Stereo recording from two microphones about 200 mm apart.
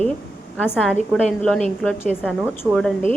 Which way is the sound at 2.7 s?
5° left (ahead or behind).